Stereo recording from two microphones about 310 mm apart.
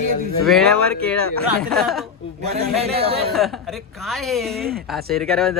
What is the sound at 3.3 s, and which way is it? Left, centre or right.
Speech, centre.